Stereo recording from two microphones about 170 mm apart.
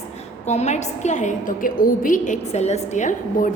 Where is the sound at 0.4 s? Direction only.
40° left (ahead or behind).